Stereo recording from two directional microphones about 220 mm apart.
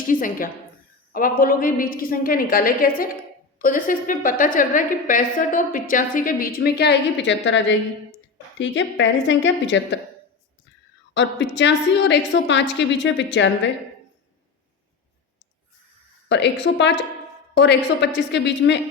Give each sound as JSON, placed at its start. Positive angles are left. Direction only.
{"t": 0.1, "sound": "a woman's voice", "side_deg": 40}
{"t": 11.1, "sound": "a woman's voice", "side_deg": 55}
{"t": 16.3, "sound": "a woman's voice", "side_deg": 55}